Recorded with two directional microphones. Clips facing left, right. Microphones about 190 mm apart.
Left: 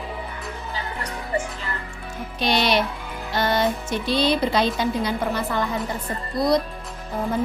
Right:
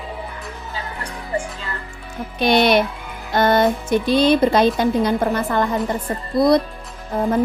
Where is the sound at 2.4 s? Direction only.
55° right (ahead or behind).